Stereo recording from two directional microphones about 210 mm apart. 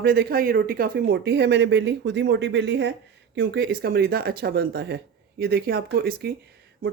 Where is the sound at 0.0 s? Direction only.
50° right (ahead or behind).